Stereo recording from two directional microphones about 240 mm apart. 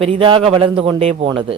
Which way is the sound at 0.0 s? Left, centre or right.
Right.